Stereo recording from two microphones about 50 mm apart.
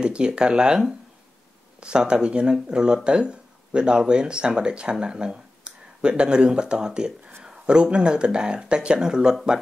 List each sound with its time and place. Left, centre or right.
0.0 s speech: centre